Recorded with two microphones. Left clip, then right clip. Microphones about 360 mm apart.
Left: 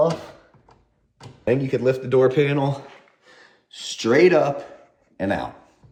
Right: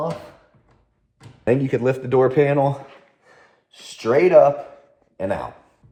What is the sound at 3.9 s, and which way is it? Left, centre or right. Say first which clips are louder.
Speech: right 2 dB; centre.